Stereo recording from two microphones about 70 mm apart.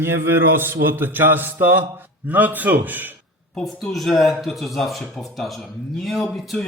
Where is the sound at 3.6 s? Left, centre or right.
Centre.